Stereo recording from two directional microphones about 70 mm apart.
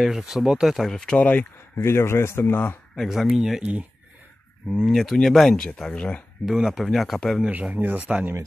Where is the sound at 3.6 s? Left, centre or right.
Centre.